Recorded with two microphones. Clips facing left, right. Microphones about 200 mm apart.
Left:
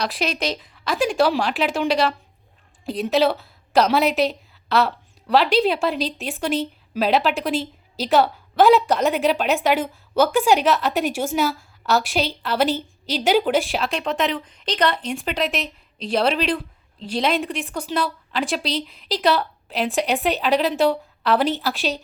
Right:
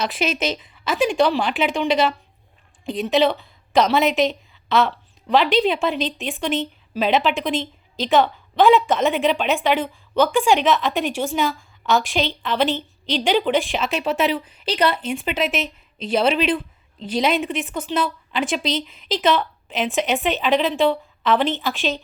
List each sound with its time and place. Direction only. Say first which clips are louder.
0.0 s a woman's voice: right 2 dB; centre (ahead or behind)
18.6 s speech: right 2 dB; 35° left (ahead or behind)
18.9 s a woman's voice: even; centre (ahead or behind)